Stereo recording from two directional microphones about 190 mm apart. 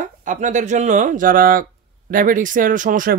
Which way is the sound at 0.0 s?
40° right (ahead or behind).